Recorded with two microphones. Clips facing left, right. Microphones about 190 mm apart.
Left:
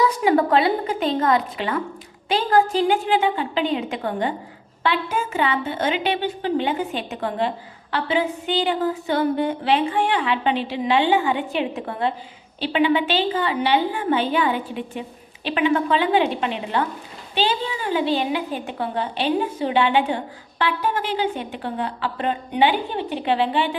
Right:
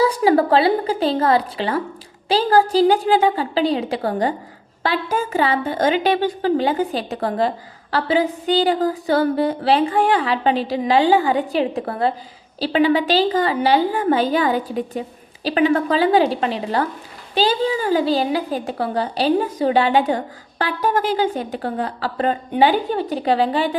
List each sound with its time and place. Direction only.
0.0 s a woman's voice: 35° right (ahead or behind)